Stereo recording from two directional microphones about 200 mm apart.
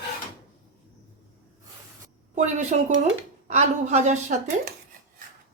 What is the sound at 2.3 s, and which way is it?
Speech, 35° right (ahead or behind).